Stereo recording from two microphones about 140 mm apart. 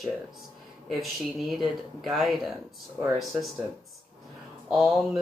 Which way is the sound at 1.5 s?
Centre (ahead or behind).